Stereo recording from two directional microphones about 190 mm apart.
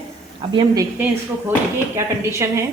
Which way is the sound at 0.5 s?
20° right (ahead or behind).